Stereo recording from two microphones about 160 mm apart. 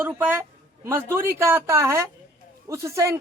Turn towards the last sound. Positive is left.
turn(degrees=-20)  # may be behind; listen again after turning